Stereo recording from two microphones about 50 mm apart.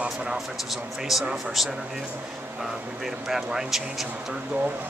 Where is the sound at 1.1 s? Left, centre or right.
Centre.